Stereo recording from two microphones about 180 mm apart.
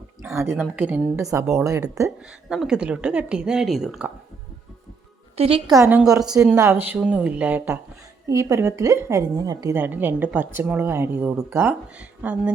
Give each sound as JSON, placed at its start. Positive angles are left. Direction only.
{"t": 0.2, "sound": "a sound", "side_deg": -15}
{"t": 0.8, "sound": "a woman's voice", "side_deg": -10}
{"t": 2.0, "sound": "a woman's voice", "side_deg": 0}
{"t": 5.4, "sound": "a woman's voice", "side_deg": -30}
{"t": 5.7, "sound": "a woman's voice", "side_deg": -15}
{"t": 6.1, "sound": "a woman's voice", "side_deg": -5}